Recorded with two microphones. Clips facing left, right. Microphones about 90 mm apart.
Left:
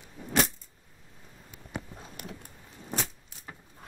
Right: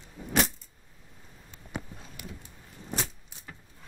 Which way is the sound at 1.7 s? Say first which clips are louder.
Even; 60° left (ahead or behind).